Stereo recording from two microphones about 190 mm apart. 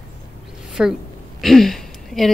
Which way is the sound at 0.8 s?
5° right (ahead or behind).